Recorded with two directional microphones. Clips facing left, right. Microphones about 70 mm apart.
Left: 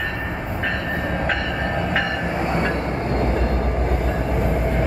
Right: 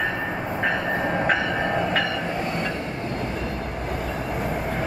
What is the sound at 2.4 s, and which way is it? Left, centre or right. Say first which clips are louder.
Train: left 5 dB; left.